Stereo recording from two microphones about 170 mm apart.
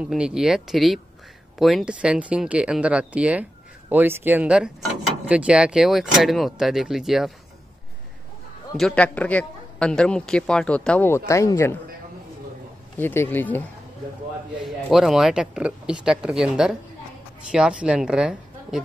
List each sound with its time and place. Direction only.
0.0 s a man's voice: 5° right (ahead or behind)
8.7 s a man's voice: 5° left (ahead or behind)
11.1 s speech: 15° left (ahead or behind)
13.0 s speech: 10° left (ahead or behind)
14.9 s a man's voice: centre (ahead or behind)